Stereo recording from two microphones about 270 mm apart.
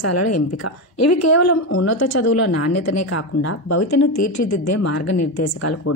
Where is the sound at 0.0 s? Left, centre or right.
Left.